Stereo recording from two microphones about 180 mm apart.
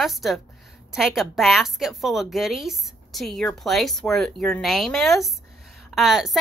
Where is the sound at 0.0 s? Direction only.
Centre (ahead or behind).